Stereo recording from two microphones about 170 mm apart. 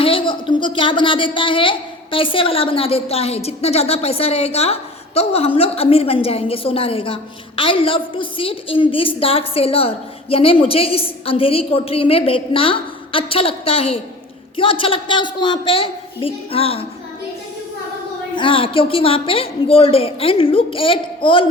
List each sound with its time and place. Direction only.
0.0 s speech: 30° left (ahead or behind)
18.3 s speech: 30° left (ahead or behind)